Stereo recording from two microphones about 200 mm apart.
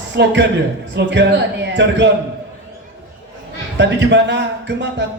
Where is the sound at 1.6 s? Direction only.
60° right (ahead or behind).